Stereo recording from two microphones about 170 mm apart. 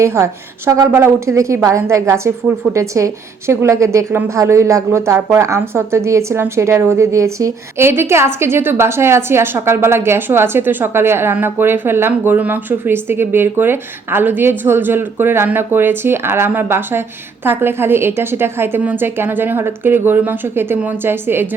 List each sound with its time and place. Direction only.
0.0 s a woman's voice: 15° right (ahead or behind)